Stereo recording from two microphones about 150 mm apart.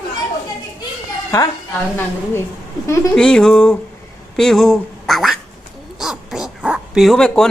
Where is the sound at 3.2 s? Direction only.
5° left (ahead or behind).